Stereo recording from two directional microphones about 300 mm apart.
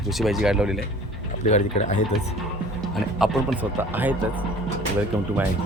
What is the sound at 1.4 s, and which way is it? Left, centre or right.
Speech, left.